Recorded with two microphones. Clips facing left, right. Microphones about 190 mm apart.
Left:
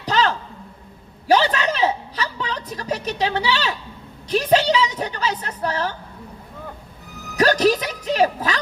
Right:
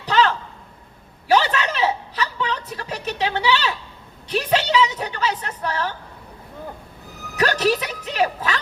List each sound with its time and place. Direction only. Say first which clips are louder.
0.0 s a sound: right 1 dB; 40° left (ahead or behind)
4.3 s a woman's voice: left 3 dB; 40° left (ahead or behind)
7.3 s a woman's voice: left 3 dB; 40° left (ahead or behind)